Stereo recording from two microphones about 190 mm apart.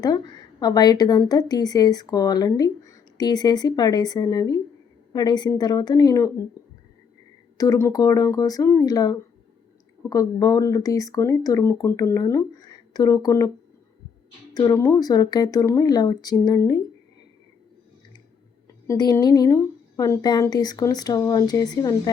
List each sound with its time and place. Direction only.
0.0 s a woman's voice: 20° left (ahead or behind)
7.6 s a woman's voice: 15° left (ahead or behind)
14.5 s a woman's voice: 20° left (ahead or behind)
18.9 s a woman's voice: 20° left (ahead or behind)